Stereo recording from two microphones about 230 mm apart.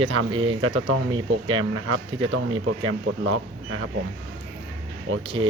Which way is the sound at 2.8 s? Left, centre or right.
Right.